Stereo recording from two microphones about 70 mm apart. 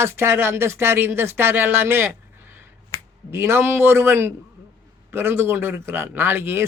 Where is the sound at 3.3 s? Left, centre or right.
Right.